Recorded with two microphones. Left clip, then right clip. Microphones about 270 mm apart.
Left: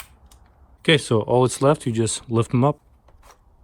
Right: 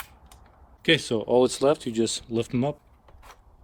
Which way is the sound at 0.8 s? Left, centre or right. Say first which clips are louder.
Left 4 dB; centre.